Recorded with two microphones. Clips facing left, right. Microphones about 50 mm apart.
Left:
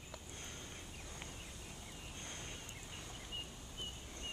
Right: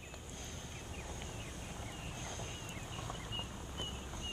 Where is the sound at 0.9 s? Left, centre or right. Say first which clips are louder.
Right 5 dB; right.